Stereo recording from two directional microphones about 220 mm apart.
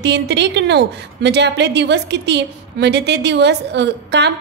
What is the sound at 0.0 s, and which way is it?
A woman's voice, 50° right (ahead or behind).